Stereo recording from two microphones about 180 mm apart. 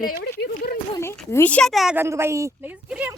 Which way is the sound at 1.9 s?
15° right (ahead or behind).